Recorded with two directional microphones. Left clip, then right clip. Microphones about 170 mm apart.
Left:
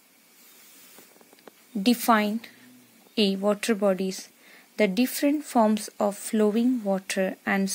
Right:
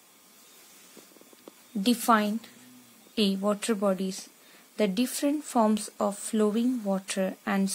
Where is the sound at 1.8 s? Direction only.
20° left (ahead or behind).